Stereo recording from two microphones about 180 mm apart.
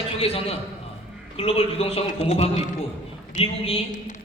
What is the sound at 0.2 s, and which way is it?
A woman's voice, 30° left (ahead or behind).